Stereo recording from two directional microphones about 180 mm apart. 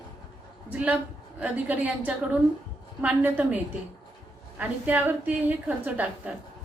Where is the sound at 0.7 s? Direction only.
5° right (ahead or behind).